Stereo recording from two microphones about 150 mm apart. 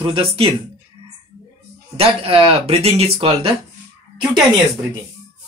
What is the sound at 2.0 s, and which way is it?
Speech, 40° right (ahead or behind).